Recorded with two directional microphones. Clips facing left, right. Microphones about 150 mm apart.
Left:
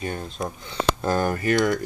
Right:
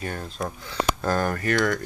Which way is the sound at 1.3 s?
10° left (ahead or behind).